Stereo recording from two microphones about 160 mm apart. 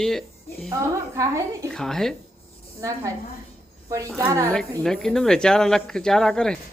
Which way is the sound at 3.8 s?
20° right (ahead or behind).